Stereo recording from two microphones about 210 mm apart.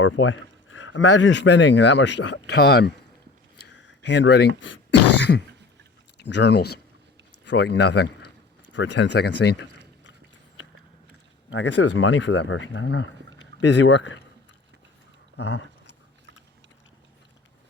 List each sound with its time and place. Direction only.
0.0 s a man's voice: 65° left (ahead or behind)
11.5 s speech: 65° left (ahead or behind)
15.4 s a sound: 60° left (ahead or behind)